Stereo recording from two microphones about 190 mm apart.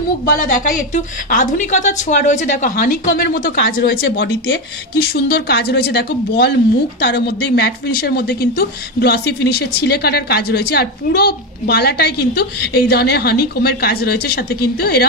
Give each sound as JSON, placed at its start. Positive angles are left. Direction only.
{"t": 0.2, "sound": "a woman's voice", "side_deg": 50}
{"t": 3.8, "sound": "speech", "side_deg": 70}